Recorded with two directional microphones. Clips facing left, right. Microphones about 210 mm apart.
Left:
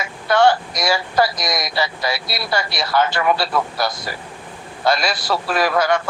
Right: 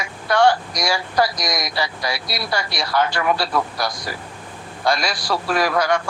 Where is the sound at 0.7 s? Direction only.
25° left (ahead or behind).